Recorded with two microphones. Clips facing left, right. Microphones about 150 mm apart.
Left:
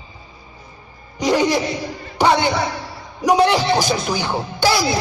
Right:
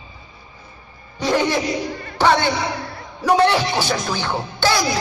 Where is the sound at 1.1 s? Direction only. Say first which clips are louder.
Left 2 dB; 15° left (ahead or behind).